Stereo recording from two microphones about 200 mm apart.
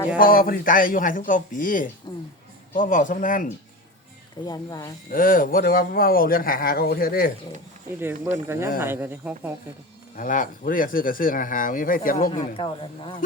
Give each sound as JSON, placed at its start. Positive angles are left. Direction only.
{"t": 0.2, "sound": "speech", "side_deg": 45}
{"t": 4.4, "sound": "speech", "side_deg": 20}
{"t": 5.1, "sound": "speech", "side_deg": 45}
{"t": 7.9, "sound": "speech", "side_deg": -10}
{"t": 10.2, "sound": "speech", "side_deg": 40}
{"t": 12.3, "sound": "speech", "side_deg": 25}